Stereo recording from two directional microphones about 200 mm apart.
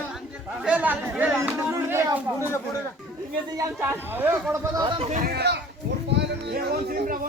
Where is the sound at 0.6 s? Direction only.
5° right (ahead or behind).